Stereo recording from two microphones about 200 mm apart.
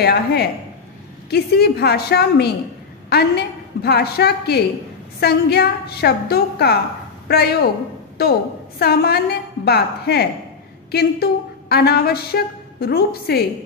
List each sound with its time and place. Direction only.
0.0 s a woman's voice: 50° left (ahead or behind)